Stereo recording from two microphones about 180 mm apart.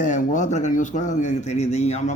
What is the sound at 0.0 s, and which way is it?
Speech, 45° left (ahead or behind).